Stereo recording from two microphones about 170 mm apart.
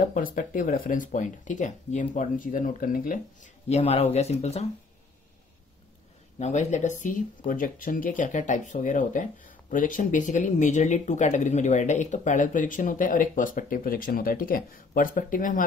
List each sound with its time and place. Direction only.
0.0 s speech: 55° left (ahead or behind)
3.6 s speech: 40° left (ahead or behind)
6.4 s speech: 45° left (ahead or behind)